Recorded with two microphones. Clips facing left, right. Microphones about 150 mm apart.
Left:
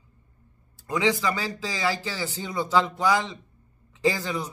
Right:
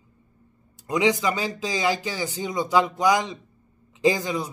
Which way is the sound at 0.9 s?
20° right (ahead or behind).